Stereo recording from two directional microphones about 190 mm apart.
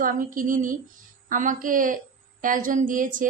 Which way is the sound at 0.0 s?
45° right (ahead or behind).